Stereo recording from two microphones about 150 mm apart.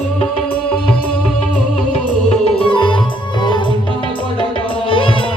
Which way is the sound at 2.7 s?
35° left (ahead or behind).